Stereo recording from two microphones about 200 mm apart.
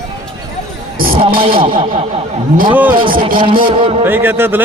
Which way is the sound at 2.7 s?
10° right (ahead or behind).